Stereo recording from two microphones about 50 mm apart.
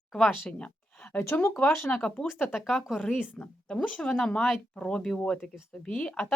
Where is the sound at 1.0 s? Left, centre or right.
Left.